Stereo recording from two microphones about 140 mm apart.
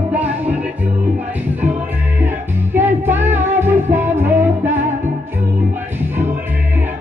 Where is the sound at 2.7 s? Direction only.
15° right (ahead or behind).